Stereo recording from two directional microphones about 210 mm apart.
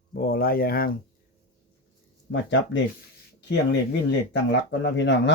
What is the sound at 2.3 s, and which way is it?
Speech, 55° left (ahead or behind).